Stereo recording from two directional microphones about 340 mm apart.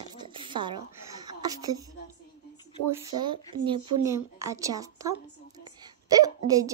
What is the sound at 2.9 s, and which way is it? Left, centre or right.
Speech, centre.